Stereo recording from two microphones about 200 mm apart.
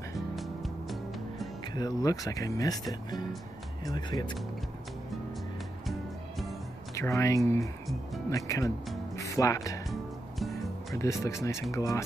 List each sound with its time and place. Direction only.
0.4 s music: centre (ahead or behind)
1.7 s speech: 20° left (ahead or behind)
5.9 s music: centre (ahead or behind)
7.0 s speech: 15° left (ahead or behind)
11.0 s speech: 15° left (ahead or behind)